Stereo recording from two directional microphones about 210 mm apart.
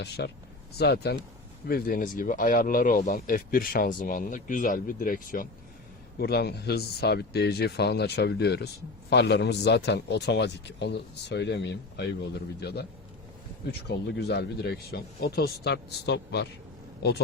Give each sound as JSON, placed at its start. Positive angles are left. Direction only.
{"t": 0.2, "sound": "speech", "side_deg": 50}